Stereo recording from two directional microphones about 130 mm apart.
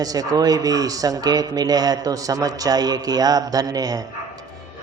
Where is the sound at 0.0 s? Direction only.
30° right (ahead or behind).